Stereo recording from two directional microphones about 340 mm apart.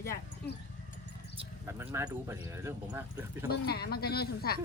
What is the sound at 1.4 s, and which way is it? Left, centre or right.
Speech, centre.